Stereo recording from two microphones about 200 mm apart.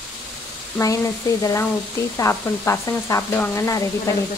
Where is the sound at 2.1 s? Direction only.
15° left (ahead or behind).